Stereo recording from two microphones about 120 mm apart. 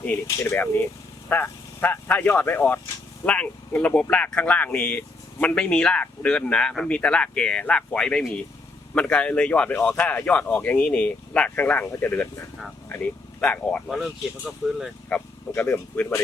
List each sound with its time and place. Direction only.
0.5 s speech: 15° left (ahead or behind); by 14.8 s 5° right (ahead or behind)
15.1 s speech: 15° left (ahead or behind)